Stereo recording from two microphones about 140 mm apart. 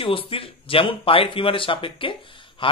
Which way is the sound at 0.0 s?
40° left (ahead or behind).